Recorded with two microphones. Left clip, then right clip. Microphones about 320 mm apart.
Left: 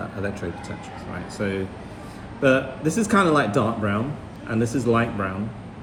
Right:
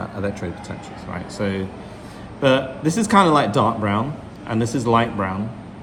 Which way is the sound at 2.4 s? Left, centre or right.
Right.